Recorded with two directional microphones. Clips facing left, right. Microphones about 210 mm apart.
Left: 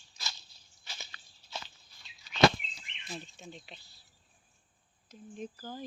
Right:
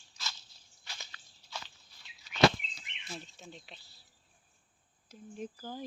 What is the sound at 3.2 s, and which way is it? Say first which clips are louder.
Speech: left 2 dB; centre (ahead or behind).